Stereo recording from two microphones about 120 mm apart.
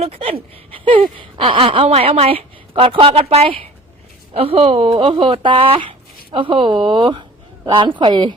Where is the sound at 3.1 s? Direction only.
60° right (ahead or behind).